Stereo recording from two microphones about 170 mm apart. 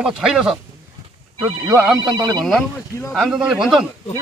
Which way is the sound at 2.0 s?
25° right (ahead or behind).